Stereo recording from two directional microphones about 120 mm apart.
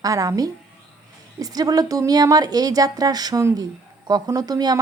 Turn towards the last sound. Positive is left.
turn(degrees=-30)  # may be behind; listen again after turning